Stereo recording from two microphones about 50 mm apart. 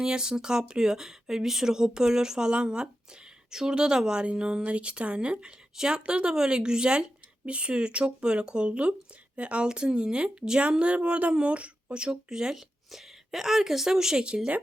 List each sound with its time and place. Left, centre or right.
0.0 s speech: centre